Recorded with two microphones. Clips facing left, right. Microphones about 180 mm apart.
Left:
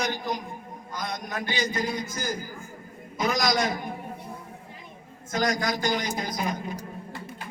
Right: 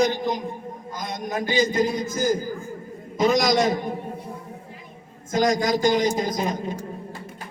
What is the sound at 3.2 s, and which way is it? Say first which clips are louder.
Speech: right 6 dB; 25° right (ahead or behind).